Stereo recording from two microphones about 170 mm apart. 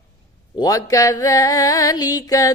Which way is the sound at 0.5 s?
20° left (ahead or behind).